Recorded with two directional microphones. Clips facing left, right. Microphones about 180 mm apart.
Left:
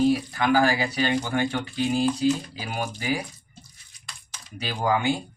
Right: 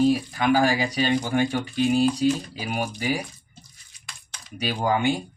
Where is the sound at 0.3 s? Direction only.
15° right (ahead or behind).